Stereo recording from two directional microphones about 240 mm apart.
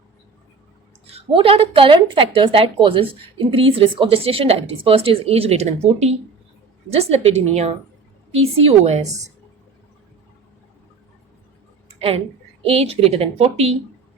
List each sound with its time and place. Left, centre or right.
1.1 s a woman's voice: right
11.9 s a woman's voice: right